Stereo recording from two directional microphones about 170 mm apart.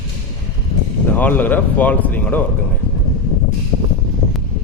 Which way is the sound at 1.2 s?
10° left (ahead or behind).